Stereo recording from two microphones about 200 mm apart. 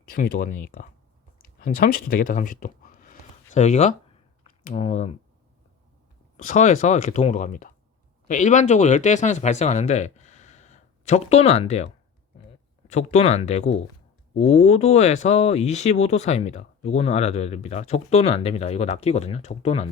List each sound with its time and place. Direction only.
0.1 s speech: 45° left (ahead or behind)
6.3 s speech: 40° left (ahead or behind)
12.9 s speech: 35° left (ahead or behind)